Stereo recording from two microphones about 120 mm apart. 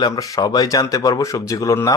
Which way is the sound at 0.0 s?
35° left (ahead or behind).